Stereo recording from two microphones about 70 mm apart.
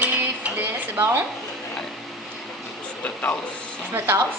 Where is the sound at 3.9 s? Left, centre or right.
Right.